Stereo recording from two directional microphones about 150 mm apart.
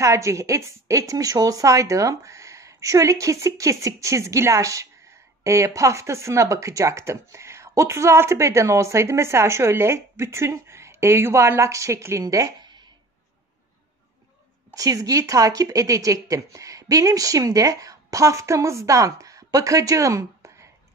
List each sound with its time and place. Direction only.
0.0 s speech: 20° right (ahead or behind)
14.7 s speech: 25° right (ahead or behind)